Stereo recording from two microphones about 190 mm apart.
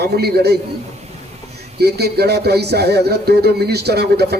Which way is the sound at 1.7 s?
60° right (ahead or behind).